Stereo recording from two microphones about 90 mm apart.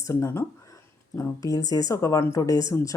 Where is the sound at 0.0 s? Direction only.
30° left (ahead or behind).